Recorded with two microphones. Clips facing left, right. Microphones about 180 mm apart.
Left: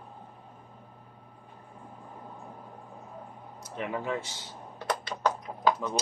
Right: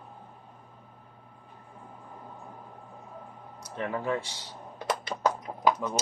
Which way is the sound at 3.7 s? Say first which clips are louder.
Right 1 dB; 15° left (ahead or behind).